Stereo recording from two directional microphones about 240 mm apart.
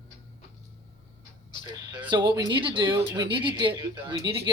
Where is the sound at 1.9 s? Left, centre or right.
Centre.